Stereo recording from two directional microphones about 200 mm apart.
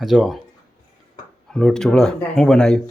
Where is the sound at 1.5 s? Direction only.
5° left (ahead or behind).